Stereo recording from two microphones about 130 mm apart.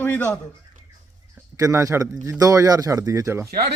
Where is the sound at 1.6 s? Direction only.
25° right (ahead or behind).